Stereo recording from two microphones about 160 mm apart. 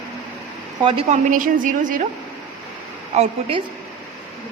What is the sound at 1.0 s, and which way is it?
A woman's voice, 50° right (ahead or behind).